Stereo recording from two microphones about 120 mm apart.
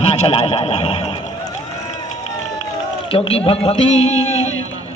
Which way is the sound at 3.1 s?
50° left (ahead or behind).